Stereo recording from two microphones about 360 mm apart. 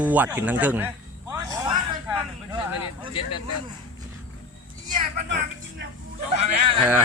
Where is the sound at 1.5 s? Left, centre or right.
Centre.